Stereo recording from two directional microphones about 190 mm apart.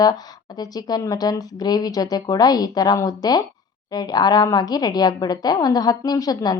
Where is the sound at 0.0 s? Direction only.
20° left (ahead or behind).